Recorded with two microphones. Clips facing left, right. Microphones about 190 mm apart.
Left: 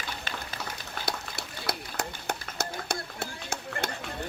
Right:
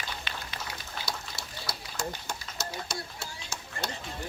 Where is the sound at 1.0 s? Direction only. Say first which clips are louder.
Left 6 dB; 60° left (ahead or behind).